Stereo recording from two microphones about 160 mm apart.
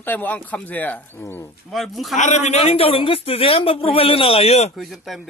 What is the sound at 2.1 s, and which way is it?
Speech, 50° left (ahead or behind).